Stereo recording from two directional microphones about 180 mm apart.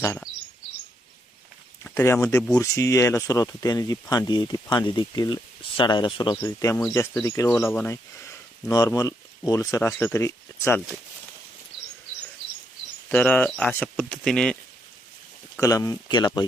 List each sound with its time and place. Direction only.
0.0 s speech: 10° left (ahead or behind)
1.8 s a sound: 15° left (ahead or behind)
2.2 s speech: 15° left (ahead or behind)
13.1 s speech: 10° left (ahead or behind)
15.5 s speech: 20° left (ahead or behind)